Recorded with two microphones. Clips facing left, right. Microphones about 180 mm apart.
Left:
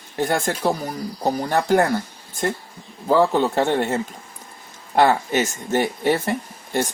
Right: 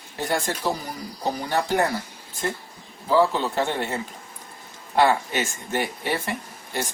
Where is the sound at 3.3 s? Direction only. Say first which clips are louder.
Left 6 dB; 50° left (ahead or behind).